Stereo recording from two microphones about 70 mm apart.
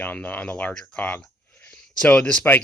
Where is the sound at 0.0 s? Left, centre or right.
Left.